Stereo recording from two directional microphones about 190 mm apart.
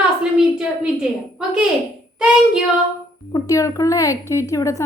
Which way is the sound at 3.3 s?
15° left (ahead or behind).